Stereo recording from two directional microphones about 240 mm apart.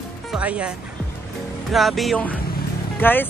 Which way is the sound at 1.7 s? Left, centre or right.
Centre.